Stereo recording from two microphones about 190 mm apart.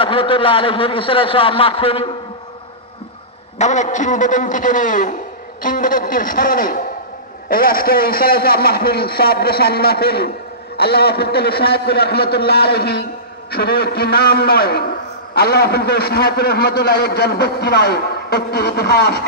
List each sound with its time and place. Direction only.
0.0 s a man's voice: 25° left (ahead or behind)
3.5 s a man's voice: 40° left (ahead or behind); by 19.1 s 60° left (ahead or behind)